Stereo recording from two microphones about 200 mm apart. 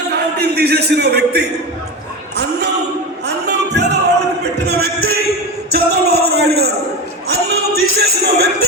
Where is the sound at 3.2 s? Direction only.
55° right (ahead or behind).